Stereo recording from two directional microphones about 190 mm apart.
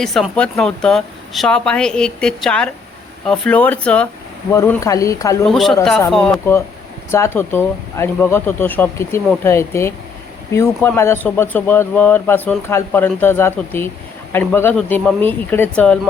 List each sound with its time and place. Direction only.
0.0 s speech: centre (ahead or behind)
5.5 s speech: centre (ahead or behind)